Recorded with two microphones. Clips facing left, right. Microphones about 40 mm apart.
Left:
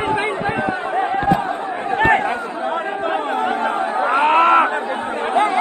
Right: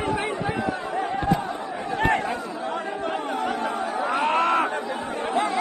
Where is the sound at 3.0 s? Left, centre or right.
Left.